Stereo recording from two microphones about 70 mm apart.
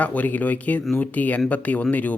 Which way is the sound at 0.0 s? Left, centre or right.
Left.